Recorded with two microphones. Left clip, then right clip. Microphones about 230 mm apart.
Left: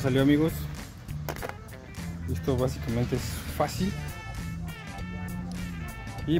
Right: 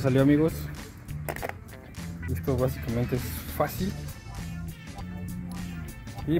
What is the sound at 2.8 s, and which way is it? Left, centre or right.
Speech, centre.